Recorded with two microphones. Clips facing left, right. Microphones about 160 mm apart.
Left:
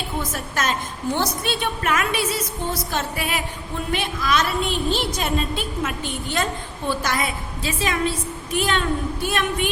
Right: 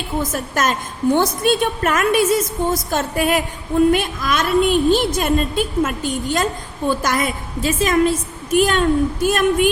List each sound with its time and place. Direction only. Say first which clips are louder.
0.2 s a woman's voice: right 7 dB; 45° right (ahead or behind)